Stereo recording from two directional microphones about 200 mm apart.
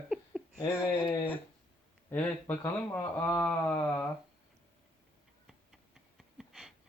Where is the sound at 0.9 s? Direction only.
10° left (ahead or behind).